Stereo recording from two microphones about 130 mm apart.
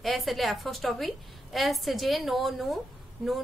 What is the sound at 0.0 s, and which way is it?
A woman's voice, centre (ahead or behind).